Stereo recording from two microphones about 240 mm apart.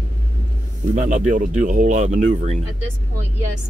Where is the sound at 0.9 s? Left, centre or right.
Right.